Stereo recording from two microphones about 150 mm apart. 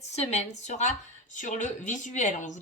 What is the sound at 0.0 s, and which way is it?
A woman's voice, 50° left (ahead or behind).